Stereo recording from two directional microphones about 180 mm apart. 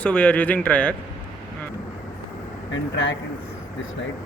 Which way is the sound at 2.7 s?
90° left.